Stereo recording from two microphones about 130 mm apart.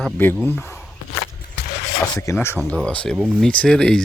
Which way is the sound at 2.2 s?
20° left (ahead or behind).